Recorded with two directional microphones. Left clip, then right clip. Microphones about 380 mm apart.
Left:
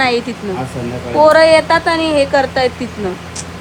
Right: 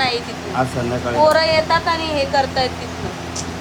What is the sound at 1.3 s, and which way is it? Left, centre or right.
Speech, left.